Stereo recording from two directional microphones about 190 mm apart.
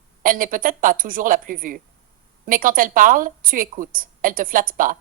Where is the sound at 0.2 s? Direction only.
45° right (ahead or behind).